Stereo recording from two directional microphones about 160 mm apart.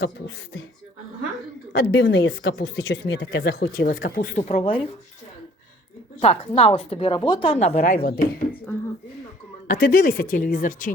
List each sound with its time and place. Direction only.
1.7 s speech: 85° left; by 4.9 s 35° left (ahead or behind)
6.1 s a woman's voice: 40° left (ahead or behind)
7.9 s speech: 70° left (ahead or behind)
9.6 s speech: 65° left (ahead or behind)